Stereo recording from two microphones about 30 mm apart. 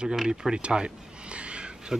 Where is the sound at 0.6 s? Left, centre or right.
Right.